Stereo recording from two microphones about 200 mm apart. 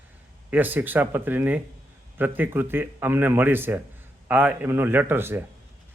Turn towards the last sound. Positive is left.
turn(degrees=-10)  # may be behind; listen again after turning